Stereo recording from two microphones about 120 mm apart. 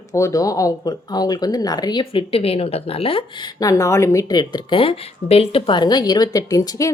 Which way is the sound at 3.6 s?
25° left (ahead or behind).